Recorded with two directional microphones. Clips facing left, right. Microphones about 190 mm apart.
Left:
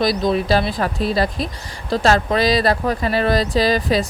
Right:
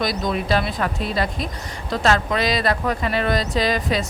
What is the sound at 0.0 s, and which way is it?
Speech, 30° left (ahead or behind).